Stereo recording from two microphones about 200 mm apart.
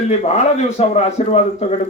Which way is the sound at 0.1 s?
35° left (ahead or behind).